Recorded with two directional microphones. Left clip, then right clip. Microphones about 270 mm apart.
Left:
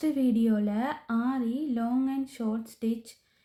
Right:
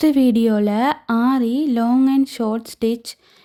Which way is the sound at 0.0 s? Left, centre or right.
Right.